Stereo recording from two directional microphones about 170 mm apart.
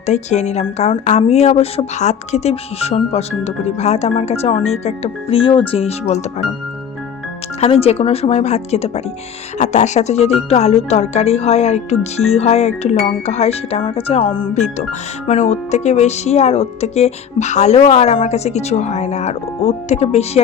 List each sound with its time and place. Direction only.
0.0 s speech: 40° left (ahead or behind)
7.6 s speech: 35° left (ahead or behind)
14.5 s speech: 45° left (ahead or behind)